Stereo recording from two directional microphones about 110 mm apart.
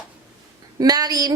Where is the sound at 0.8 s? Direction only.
35° right (ahead or behind).